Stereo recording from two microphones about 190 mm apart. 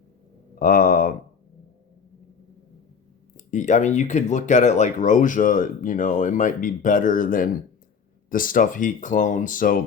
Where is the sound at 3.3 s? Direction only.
40° left (ahead or behind).